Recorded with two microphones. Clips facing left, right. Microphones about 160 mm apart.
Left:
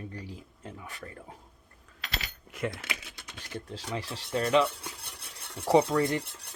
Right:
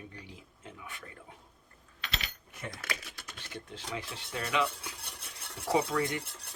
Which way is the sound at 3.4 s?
40° left (ahead or behind).